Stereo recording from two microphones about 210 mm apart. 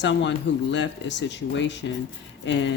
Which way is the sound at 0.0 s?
60° left (ahead or behind).